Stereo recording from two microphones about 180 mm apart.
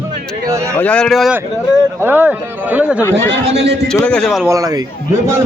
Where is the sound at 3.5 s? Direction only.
70° right (ahead or behind).